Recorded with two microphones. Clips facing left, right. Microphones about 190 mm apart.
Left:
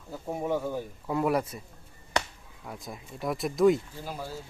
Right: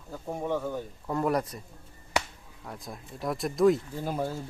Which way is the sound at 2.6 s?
Centre (ahead or behind).